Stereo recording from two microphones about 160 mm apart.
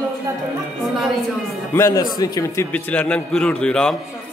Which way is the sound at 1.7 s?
20° left (ahead or behind).